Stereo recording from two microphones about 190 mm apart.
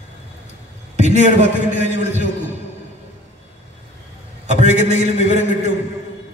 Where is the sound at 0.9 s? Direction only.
35° right (ahead or behind).